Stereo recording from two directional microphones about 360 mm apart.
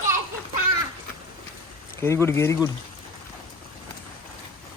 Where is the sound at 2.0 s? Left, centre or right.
Centre.